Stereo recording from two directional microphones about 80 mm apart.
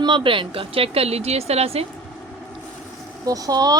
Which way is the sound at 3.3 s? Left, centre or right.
Right.